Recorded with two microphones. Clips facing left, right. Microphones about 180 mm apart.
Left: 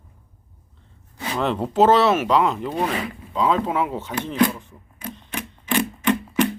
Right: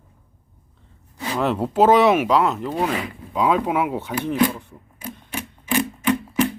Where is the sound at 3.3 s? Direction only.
10° right (ahead or behind).